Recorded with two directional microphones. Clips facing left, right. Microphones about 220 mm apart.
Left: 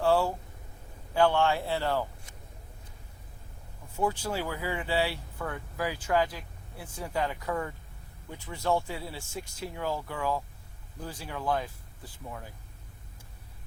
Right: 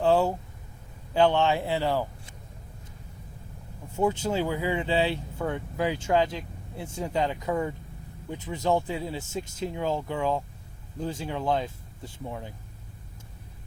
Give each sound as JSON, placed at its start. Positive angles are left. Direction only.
{"t": 0.0, "sound": "a sound", "side_deg": -20}
{"t": 1.1, "sound": "speech", "side_deg": -20}
{"t": 3.9, "sound": "speech", "side_deg": -25}